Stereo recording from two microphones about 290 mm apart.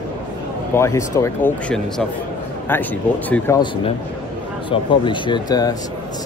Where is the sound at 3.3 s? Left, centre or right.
Centre.